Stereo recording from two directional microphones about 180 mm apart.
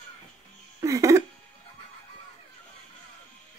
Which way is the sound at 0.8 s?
15° right (ahead or behind).